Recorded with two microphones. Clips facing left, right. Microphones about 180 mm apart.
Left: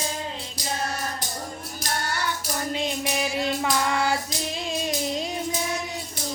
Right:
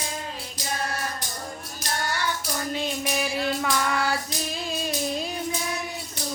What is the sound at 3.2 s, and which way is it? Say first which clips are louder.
Music: left 1 dB; 25° left (ahead or behind).